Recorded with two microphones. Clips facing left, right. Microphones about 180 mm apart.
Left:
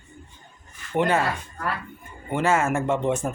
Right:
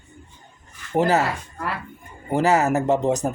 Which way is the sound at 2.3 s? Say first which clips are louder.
Right 3 dB; 40° right (ahead or behind).